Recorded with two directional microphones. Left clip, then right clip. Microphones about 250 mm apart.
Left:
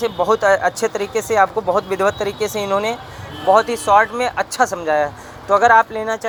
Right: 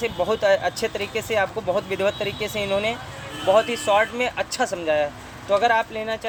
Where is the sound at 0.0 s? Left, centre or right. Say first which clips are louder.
Left 6 dB; centre.